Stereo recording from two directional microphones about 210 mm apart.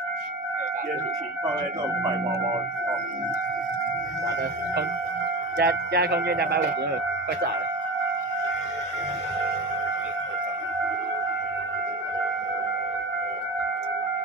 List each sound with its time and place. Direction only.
5.6 s speech: 50° right (ahead or behind)